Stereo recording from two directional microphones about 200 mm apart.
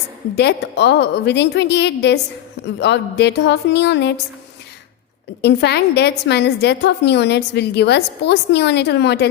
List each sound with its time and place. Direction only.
0.3 s a woman's voice: 55° left (ahead or behind)
5.4 s a woman's voice: 55° left (ahead or behind)